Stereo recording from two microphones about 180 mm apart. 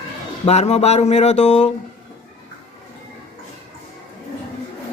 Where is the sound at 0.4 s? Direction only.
35° left (ahead or behind).